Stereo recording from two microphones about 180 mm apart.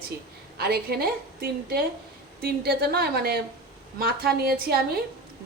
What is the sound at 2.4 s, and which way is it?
A woman's voice, 60° right (ahead or behind).